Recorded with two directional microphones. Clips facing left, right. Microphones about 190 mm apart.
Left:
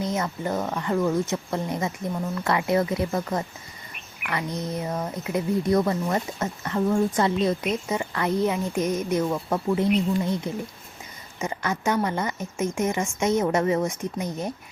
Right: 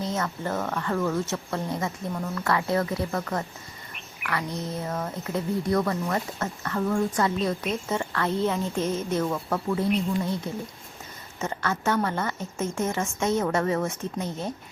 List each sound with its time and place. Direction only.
0.0 s speech: 15° left (ahead or behind)